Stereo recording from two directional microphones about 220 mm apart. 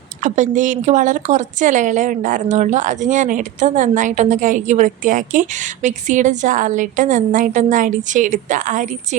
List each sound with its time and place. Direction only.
0.2 s speech: 35° right (ahead or behind)